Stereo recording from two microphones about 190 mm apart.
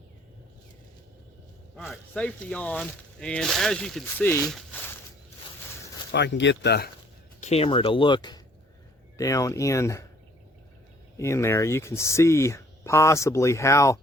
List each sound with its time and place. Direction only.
1.7 s speech: 5° left (ahead or behind)
6.1 s speech: 65° left (ahead or behind)
7.4 s speech: 30° left (ahead or behind); by 10.1 s 15° left (ahead or behind)
11.2 s speech: 15° left (ahead or behind)